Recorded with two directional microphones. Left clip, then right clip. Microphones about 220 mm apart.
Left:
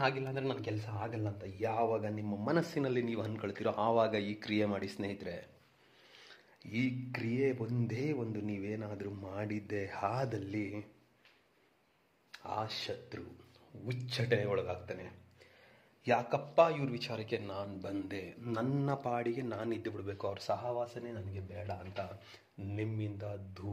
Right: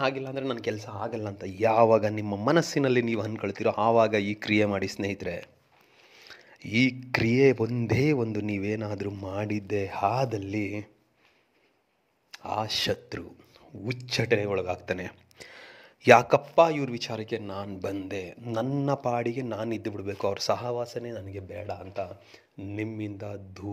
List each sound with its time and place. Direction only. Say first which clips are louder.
0.0 s a man's voice: right 5 dB; 25° right (ahead or behind)
1.2 s a man's voice: right 14 dB; 35° right (ahead or behind)
12.3 s speech: right 9 dB; 30° right (ahead or behind)
14.9 s a sound: right 12 dB; 45° right (ahead or behind)
16.5 s a man's voice: right 4 dB; 25° right (ahead or behind)